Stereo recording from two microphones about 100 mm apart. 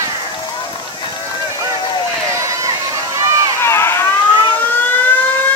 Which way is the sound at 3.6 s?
25° left (ahead or behind).